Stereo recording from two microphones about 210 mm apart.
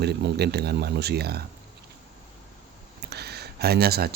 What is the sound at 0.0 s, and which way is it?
Speech, 50° right (ahead or behind).